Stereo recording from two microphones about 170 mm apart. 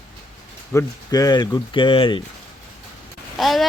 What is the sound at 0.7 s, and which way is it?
Speech, 20° left (ahead or behind).